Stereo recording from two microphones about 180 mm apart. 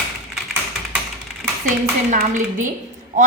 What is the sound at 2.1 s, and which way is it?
Speech, 45° right (ahead or behind).